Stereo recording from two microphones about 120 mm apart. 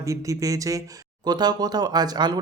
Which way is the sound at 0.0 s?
25° right (ahead or behind).